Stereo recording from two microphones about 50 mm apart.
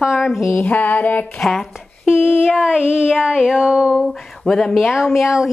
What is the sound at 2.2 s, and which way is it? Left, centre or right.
Child singing, left.